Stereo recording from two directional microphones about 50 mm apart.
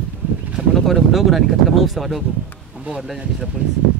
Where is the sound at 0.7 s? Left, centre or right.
Centre.